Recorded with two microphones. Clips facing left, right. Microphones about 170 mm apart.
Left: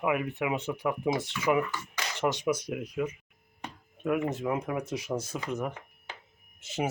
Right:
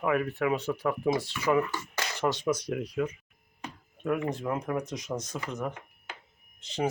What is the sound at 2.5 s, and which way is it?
Speech, 5° left (ahead or behind).